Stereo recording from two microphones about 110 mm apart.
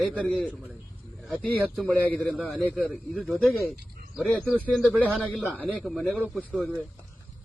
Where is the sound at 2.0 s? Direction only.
10° left (ahead or behind).